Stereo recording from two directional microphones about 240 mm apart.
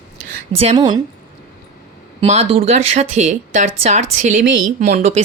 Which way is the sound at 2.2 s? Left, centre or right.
Right.